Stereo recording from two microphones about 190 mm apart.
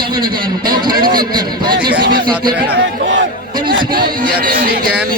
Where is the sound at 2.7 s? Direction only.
70° right (ahead or behind).